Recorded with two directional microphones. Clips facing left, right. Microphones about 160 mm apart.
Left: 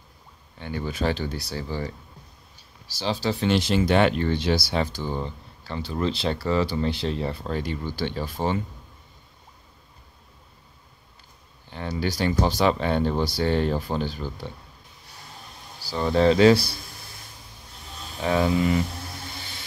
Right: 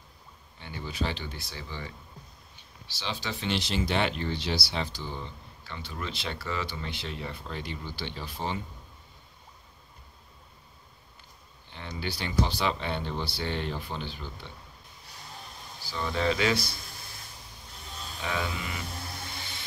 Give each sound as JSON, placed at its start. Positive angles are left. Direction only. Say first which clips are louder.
{"t": 0.6, "sound": "speech", "louder": "left 6 dB", "side_deg": 50}
{"t": 3.0, "sound": "speech", "louder": "left 10 dB", "side_deg": 35}
{"t": 12.0, "sound": "speech", "louder": "left 6 dB", "side_deg": 40}
{"t": 15.8, "sound": "speech", "louder": "left 9 dB", "side_deg": 35}
{"t": 18.2, "sound": "speech", "louder": "left 12 dB", "side_deg": 40}